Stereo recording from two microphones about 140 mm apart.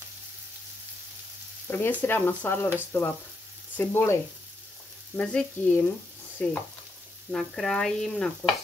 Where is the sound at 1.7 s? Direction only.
15° left (ahead or behind).